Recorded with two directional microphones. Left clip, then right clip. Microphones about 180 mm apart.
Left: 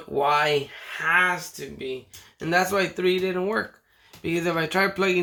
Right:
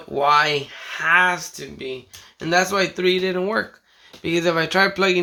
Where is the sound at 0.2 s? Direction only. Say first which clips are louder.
Right 4 dB; 20° right (ahead or behind).